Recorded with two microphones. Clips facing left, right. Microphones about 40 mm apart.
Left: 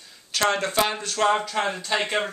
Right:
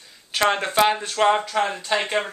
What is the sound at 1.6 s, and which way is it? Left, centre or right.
Speech, centre.